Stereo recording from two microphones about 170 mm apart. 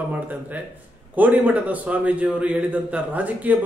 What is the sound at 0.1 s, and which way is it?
A man's voice, 10° right (ahead or behind).